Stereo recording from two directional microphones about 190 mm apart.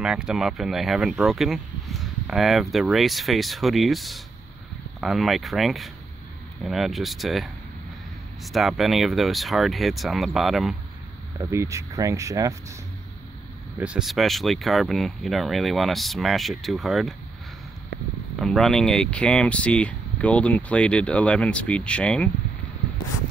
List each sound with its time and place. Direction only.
0.0 s speech: 5° right (ahead or behind)
8.5 s speech: centre (ahead or behind)
11.5 s speech: 15° right (ahead or behind)
13.7 s speech: 5° right (ahead or behind)
18.3 s speech: centre (ahead or behind)